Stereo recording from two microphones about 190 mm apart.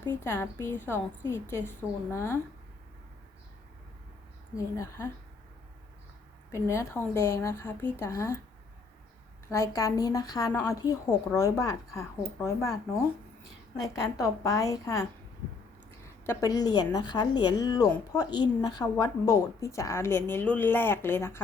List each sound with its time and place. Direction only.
0.3 s a woman's voice: 15° left (ahead or behind)
4.5 s a woman's voice: 15° left (ahead or behind)
6.5 s a woman's voice: 15° left (ahead or behind)
9.5 s a woman's voice: 15° left (ahead or behind)
13.9 s a woman's voice: 15° left (ahead or behind)
16.2 s a woman's voice: 15° left (ahead or behind)